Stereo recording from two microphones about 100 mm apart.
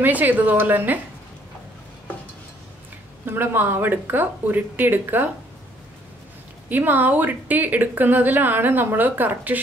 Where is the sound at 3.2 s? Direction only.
20° right (ahead or behind).